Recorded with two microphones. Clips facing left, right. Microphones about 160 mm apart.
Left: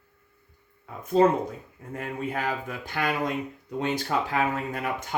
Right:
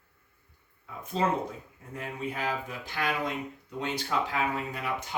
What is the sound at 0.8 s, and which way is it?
Speech, 45° left (ahead or behind).